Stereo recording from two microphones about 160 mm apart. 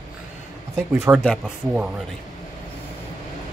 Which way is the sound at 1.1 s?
15° right (ahead or behind).